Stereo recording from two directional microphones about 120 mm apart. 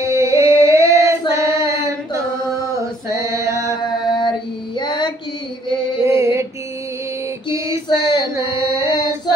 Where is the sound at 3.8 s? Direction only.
40° left (ahead or behind).